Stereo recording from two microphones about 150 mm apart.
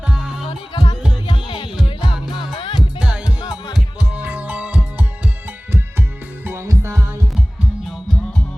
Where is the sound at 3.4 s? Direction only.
30° left (ahead or behind).